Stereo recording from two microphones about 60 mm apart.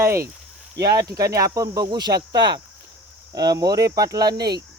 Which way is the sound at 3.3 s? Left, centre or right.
Right.